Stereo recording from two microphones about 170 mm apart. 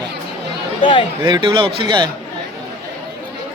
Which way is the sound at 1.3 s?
25° right (ahead or behind).